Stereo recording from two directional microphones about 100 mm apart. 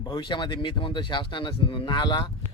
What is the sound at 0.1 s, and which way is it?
Speech, 50° left (ahead or behind).